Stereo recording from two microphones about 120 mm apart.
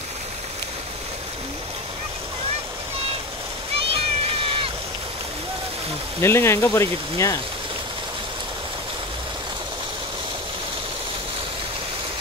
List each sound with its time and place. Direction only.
3.9 s cat: 50° right (ahead or behind)
6.2 s speech: 20° left (ahead or behind)